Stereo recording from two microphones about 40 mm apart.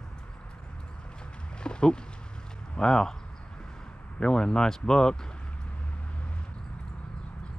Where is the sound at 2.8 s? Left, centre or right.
Centre.